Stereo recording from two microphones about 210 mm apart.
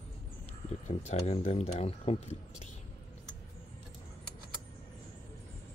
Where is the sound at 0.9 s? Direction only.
30° left (ahead or behind).